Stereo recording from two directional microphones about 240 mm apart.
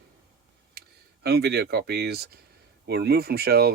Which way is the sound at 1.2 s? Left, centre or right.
Right.